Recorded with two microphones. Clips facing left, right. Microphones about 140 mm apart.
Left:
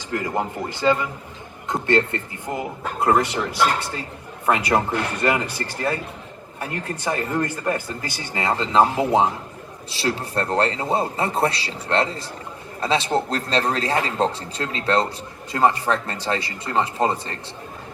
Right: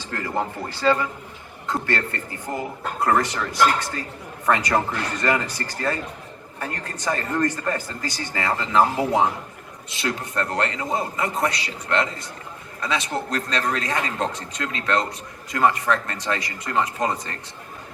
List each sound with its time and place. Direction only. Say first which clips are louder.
0.1 s speech: left 2 dB; 15° left (ahead or behind)